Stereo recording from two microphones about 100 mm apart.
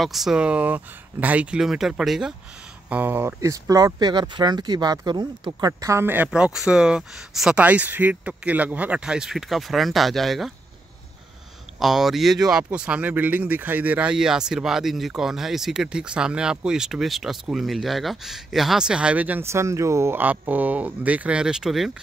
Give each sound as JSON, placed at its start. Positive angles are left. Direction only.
{"t": 0.0, "sound": "speech", "side_deg": 0}
{"t": 2.9, "sound": "speech", "side_deg": -20}
{"t": 3.3, "sound": "speech", "side_deg": -35}
{"t": 7.6, "sound": "speech", "side_deg": -15}
{"t": 11.8, "sound": "speech", "side_deg": -5}
{"t": 19.4, "sound": "speech", "side_deg": -30}